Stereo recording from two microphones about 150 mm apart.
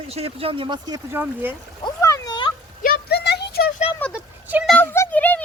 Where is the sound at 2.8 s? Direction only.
80° left.